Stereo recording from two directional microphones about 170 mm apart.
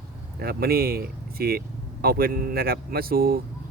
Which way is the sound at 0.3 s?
65° right (ahead or behind).